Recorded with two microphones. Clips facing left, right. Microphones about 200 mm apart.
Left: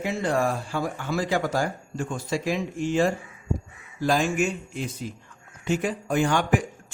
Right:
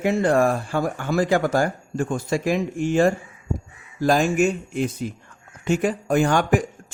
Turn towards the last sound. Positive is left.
turn(degrees=-45)  # may be behind; listen again after turning